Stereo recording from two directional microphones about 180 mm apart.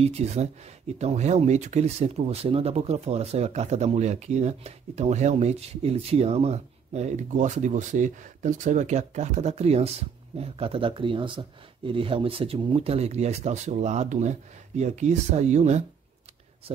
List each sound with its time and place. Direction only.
0.2 s speech: 35° right (ahead or behind)